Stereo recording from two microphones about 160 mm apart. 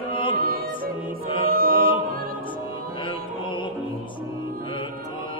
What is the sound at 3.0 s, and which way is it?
Music, 30° left (ahead or behind).